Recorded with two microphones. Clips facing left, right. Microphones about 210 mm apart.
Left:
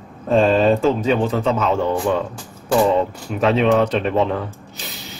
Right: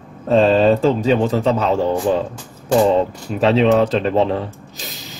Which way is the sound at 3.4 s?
35° right (ahead or behind).